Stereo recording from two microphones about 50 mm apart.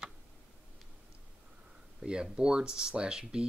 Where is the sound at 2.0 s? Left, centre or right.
Right.